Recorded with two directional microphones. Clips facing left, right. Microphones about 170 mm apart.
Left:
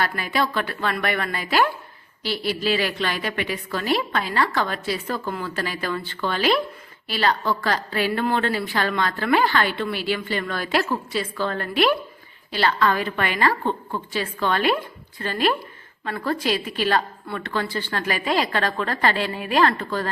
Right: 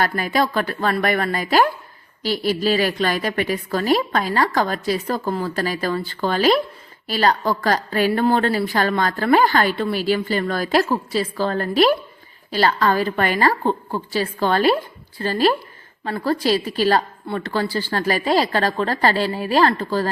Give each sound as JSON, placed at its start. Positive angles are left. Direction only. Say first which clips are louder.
{"t": 0.0, "sound": "a woman's voice", "louder": "right 4 dB", "side_deg": -40}